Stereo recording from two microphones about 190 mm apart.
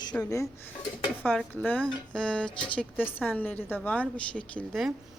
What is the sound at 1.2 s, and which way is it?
A woman's voice, 10° left (ahead or behind).